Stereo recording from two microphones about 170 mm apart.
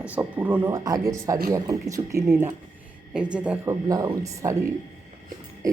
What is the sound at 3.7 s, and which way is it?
A man's voice, 20° right (ahead or behind).